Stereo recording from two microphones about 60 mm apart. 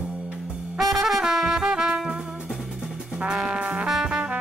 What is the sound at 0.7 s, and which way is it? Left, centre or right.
Brass instrument, centre.